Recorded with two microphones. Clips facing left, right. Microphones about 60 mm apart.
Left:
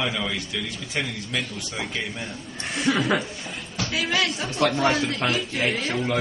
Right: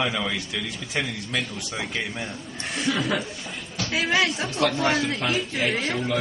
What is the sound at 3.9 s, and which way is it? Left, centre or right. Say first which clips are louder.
Speech: right 2 dB; right.